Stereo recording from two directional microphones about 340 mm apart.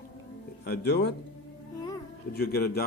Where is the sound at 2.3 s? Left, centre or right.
Left.